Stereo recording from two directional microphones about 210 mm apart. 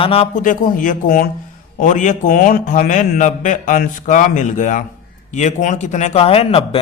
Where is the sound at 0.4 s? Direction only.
40° left (ahead or behind).